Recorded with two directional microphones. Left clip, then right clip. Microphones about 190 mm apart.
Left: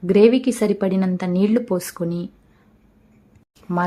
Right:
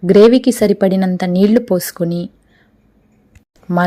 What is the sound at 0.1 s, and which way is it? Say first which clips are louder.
A woman's voice: right 6 dB; 25° right (ahead or behind).